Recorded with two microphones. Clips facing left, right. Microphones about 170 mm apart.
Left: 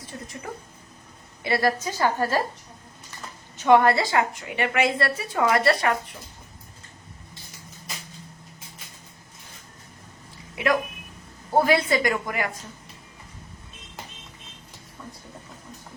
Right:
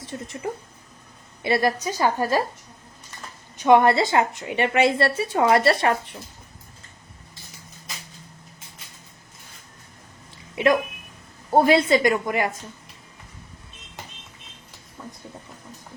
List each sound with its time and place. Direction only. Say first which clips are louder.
0.1 s a woman's voice: right 5 dB; 25° right (ahead or behind)
1.5 s a woman's voice: right 2 dB; 20° right (ahead or behind)
3.6 s a woman's voice: right 1 dB; 20° right (ahead or behind)
10.5 s a woman's voice: right 4 dB; 25° right (ahead or behind)